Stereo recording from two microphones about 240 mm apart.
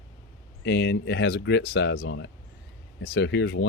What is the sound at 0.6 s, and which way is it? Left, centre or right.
Speech, left.